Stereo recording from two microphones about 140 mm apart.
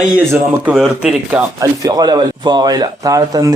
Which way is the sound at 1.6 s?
25° right (ahead or behind).